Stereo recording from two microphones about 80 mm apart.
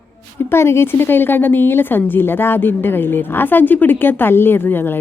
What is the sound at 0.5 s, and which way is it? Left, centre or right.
A woman's voice, left.